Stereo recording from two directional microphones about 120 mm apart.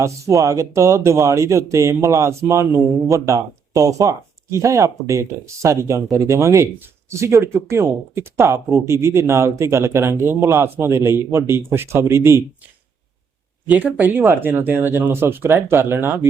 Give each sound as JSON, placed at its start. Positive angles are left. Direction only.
{"t": 0.0, "sound": "speech", "side_deg": -25}
{"t": 13.7, "sound": "speech", "side_deg": -15}